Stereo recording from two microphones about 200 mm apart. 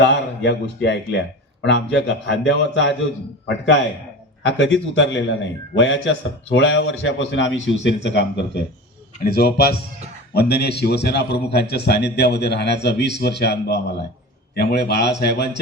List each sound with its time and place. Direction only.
0.0 s a man's voice: 60° left (ahead or behind)
4.4 s a man's voice: 65° left (ahead or behind)